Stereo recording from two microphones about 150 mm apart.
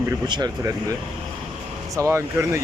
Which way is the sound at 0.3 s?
25° right (ahead or behind).